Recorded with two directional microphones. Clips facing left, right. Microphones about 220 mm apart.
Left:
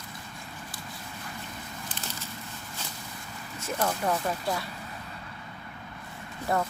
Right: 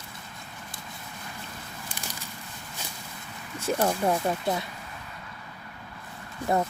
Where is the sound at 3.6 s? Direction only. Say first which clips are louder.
Right 4 dB; 25° right (ahead or behind).